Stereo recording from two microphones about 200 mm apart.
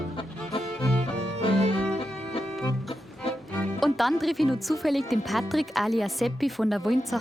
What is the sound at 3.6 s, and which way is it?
Speech, centre (ahead or behind).